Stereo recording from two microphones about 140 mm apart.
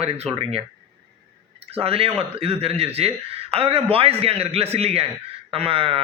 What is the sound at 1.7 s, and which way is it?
A man's voice, 45° right (ahead or behind).